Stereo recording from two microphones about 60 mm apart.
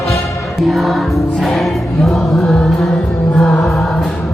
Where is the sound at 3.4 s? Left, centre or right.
Centre.